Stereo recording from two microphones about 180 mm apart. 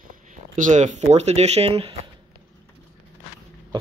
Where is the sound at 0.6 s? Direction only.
40° right (ahead or behind).